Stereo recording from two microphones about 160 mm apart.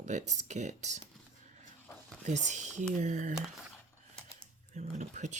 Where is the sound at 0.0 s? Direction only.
50° right (ahead or behind).